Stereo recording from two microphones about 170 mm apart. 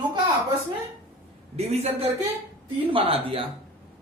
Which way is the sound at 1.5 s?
40° right (ahead or behind).